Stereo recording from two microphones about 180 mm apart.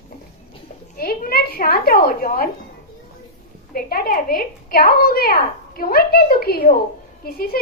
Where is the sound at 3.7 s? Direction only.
55° left (ahead or behind).